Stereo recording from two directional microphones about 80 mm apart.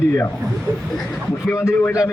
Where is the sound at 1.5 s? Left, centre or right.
Left.